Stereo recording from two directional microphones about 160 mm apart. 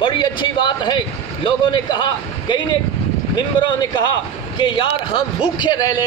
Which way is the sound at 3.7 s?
25° left (ahead or behind).